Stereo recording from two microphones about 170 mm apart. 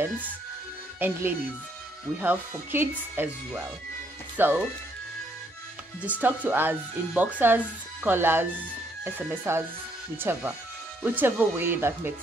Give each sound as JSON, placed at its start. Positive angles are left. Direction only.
{"t": 0.9, "sound": "speech", "side_deg": -10}
{"t": 6.0, "sound": "speech", "side_deg": -10}